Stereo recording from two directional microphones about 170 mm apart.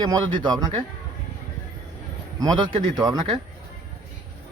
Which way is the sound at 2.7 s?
25° right (ahead or behind).